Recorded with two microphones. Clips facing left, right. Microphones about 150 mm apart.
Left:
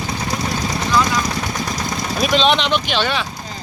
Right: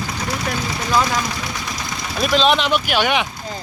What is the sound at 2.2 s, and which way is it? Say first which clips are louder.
Speech: even; centre (ahead or behind).